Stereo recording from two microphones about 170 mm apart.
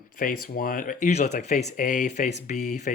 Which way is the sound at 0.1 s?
55° left (ahead or behind).